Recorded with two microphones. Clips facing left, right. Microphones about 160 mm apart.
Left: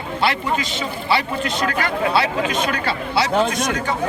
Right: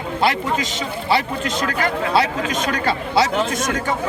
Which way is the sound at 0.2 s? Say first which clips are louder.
Right 1 dB; 45° right (ahead or behind).